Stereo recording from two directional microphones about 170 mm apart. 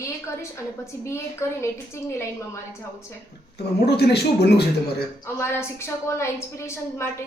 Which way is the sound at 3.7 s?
70° left (ahead or behind).